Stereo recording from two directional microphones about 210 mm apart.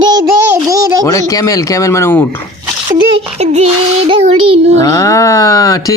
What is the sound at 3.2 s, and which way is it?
A child's voice, 30° right (ahead or behind).